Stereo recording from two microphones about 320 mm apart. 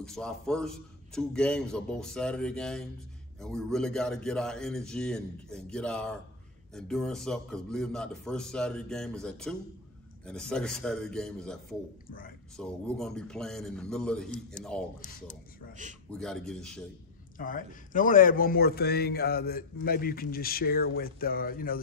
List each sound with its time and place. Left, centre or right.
0.0 s a man's voice: centre
12.5 s a man's voice: centre
15.7 s a man's voice: right
16.1 s a man's voice: centre
17.4 s a man's voice: left